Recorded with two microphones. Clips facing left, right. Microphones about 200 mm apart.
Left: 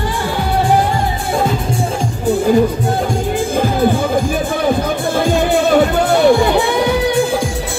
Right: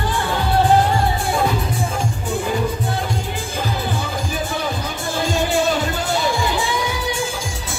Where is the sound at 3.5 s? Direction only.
50° left (ahead or behind).